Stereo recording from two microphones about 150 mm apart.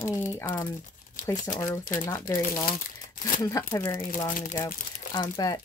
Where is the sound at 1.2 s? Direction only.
60° left (ahead or behind).